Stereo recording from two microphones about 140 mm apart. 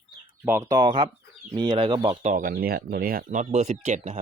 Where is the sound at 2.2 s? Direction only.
75° right (ahead or behind).